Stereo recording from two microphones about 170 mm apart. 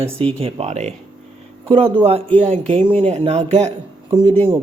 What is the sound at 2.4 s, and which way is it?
A man's voice, 35° right (ahead or behind).